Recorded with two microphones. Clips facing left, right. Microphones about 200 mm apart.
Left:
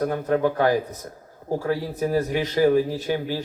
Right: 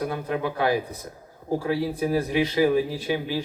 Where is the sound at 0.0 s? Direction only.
45° left (ahead or behind).